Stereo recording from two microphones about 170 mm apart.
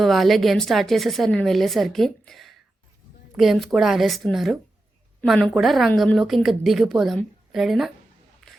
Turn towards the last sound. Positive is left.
turn(degrees=0)  # may be behind; listen again after turning